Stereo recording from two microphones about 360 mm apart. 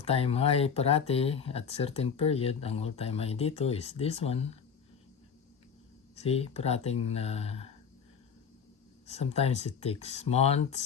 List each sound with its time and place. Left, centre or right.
0.0 s speech: centre
6.1 s speech: centre
9.0 s speech: centre